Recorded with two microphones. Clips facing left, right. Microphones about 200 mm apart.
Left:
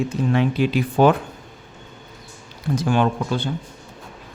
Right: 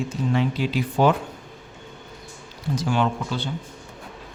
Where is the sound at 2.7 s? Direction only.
55° left (ahead or behind).